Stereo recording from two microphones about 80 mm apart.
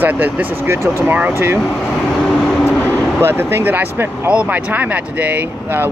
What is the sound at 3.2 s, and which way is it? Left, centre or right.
Speech, right.